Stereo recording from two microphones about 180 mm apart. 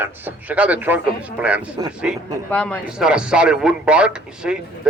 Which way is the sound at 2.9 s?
5° right (ahead or behind).